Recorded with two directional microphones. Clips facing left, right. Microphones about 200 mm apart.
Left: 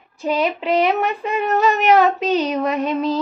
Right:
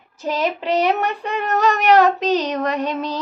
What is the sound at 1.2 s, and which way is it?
Female singing, centre (ahead or behind).